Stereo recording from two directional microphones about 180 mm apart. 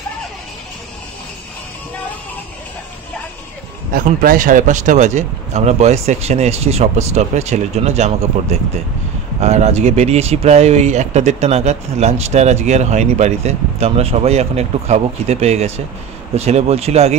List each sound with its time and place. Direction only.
3.9 s speech: 50° right (ahead or behind); by 17.1 s 35° right (ahead or behind)